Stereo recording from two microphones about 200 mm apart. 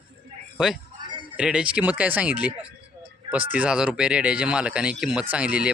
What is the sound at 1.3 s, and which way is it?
Speech, 5° right (ahead or behind).